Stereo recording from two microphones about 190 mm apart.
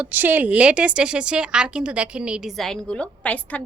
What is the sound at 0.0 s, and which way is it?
A woman's voice, 10° right (ahead or behind).